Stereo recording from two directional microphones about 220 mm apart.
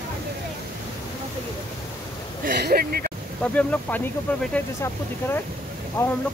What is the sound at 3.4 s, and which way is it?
Speech, 5° left (ahead or behind).